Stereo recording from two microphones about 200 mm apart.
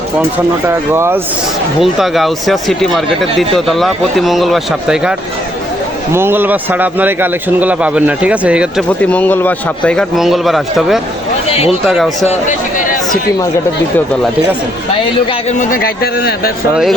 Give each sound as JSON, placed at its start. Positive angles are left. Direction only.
{"t": 0.7, "sound": "speech", "side_deg": -15}
{"t": 1.8, "sound": "speech", "side_deg": 0}
{"t": 6.1, "sound": "speech", "side_deg": -10}
{"t": 8.9, "sound": "speech", "side_deg": 5}
{"t": 12.3, "sound": "a sound", "side_deg": 40}
{"t": 15.3, "sound": "speech", "side_deg": 35}